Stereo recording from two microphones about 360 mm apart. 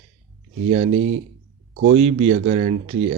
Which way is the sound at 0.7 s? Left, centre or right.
Centre.